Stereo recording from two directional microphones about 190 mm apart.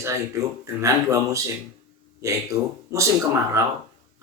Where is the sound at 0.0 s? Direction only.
15° right (ahead or behind).